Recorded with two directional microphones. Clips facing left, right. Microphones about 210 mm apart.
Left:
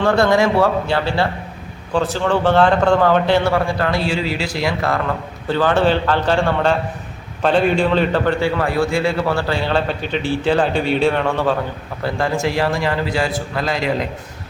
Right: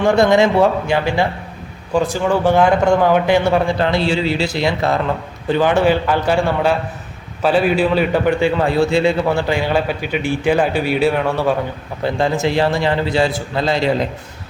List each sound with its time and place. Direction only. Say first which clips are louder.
0.0 s a man's voice: right 2 dB; 15° right (ahead or behind)
12.0 s a man's voice: right 2 dB; 20° right (ahead or behind)